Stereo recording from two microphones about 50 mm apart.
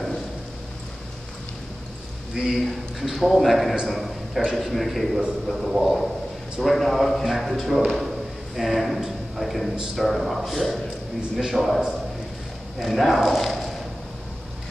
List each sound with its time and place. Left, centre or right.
2.3 s a man's voice: centre
12.8 s speech: centre